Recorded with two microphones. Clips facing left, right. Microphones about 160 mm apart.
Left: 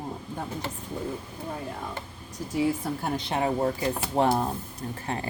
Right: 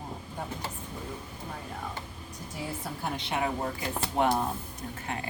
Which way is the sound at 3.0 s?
40° left (ahead or behind).